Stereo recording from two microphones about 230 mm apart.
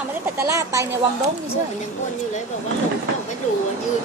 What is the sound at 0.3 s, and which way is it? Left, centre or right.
Speech, centre.